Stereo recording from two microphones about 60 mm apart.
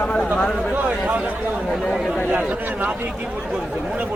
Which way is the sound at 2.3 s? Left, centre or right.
Right.